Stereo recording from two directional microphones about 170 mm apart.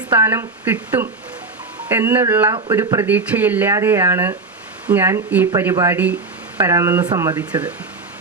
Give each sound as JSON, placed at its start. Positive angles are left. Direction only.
{"t": 0.1, "sound": "speech", "side_deg": -15}
{"t": 7.3, "sound": "speech", "side_deg": -10}